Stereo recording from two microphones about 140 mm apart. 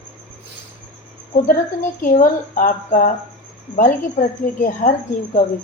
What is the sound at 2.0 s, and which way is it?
Speech, 80° left.